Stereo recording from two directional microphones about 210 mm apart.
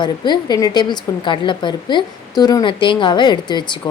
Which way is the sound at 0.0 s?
20° left (ahead or behind).